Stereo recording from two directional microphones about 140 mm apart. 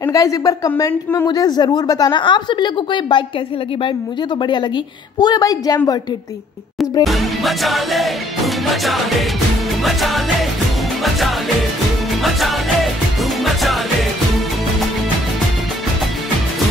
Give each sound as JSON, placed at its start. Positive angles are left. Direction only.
{"t": 0.0, "sound": "speech", "side_deg": 25}
{"t": 4.4, "sound": "speech", "side_deg": 35}
{"t": 7.1, "sound": "music", "side_deg": 0}